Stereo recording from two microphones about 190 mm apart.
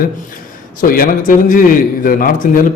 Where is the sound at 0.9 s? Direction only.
50° left (ahead or behind).